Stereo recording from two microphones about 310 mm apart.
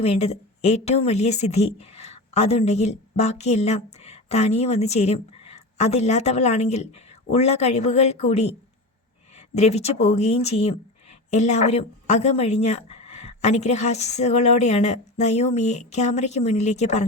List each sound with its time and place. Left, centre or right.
0.0 s speech: centre
9.6 s speech: left